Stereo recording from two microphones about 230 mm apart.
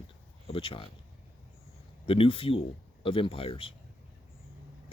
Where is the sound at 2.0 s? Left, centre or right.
Left.